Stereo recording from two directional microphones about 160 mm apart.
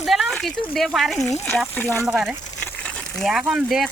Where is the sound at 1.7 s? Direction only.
10° left (ahead or behind).